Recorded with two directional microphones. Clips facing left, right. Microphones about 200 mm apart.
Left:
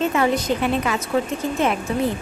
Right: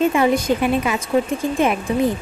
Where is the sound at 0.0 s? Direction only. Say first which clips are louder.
Right 3 dB; 10° right (ahead or behind).